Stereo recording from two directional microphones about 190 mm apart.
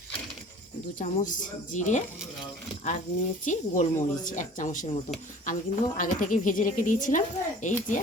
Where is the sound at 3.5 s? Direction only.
40° left (ahead or behind).